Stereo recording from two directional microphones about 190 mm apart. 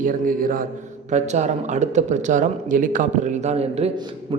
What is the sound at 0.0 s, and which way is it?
A man's voice, 45° right (ahead or behind).